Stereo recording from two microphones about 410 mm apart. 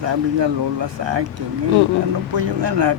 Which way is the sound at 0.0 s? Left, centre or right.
Right.